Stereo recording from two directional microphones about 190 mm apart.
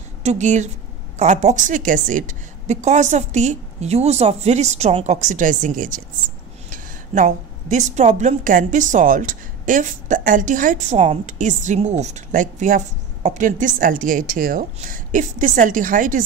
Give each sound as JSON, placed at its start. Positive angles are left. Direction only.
{"t": 0.2, "sound": "a woman's voice", "side_deg": -35}